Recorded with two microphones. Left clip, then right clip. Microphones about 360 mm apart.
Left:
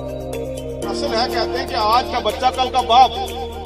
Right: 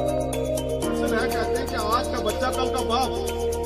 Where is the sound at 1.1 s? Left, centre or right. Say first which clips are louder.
Left 7 dB; centre.